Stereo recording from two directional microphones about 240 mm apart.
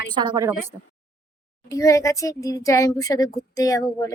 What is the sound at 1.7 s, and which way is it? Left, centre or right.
Speech, centre.